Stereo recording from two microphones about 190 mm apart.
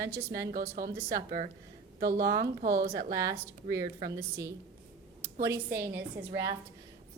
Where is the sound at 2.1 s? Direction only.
15° right (ahead or behind).